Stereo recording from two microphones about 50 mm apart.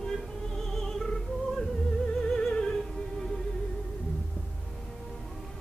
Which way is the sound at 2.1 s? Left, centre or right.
Centre.